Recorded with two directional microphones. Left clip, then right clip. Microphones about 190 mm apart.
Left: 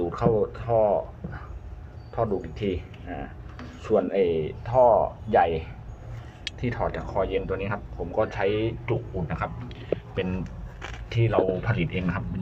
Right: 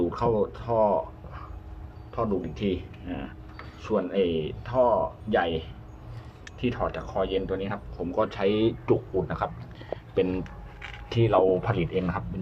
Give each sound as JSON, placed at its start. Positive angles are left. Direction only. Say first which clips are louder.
{"t": 0.0, "sound": "speech", "louder": "left 1 dB", "side_deg": -5}
{"t": 2.1, "sound": "speech", "louder": "left 2 dB", "side_deg": 0}